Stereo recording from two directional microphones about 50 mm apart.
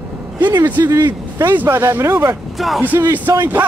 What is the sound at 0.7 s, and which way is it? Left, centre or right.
A man's voice, right.